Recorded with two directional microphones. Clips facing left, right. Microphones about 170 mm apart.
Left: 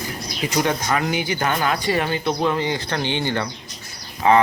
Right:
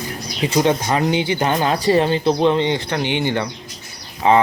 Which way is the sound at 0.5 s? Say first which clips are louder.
Right 4 dB; 20° right (ahead or behind).